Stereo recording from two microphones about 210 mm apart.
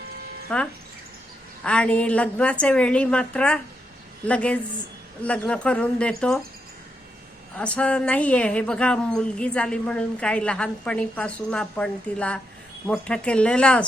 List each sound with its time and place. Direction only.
0.5 s a woman's voice: 5° left (ahead or behind)
7.5 s a woman's voice: 5° left (ahead or behind)